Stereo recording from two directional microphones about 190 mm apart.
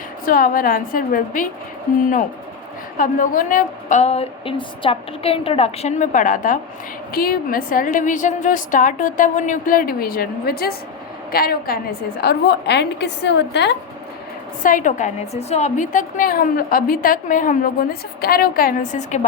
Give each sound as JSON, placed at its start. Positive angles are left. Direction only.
{"t": 0.3, "sound": "a woman's voice", "side_deg": 50}
{"t": 14.6, "sound": "a woman's voice", "side_deg": 45}